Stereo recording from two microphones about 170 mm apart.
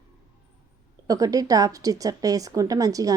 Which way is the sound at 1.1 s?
20° right (ahead or behind).